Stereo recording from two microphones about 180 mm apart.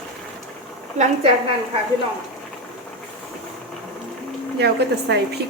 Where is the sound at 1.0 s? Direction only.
40° right (ahead or behind).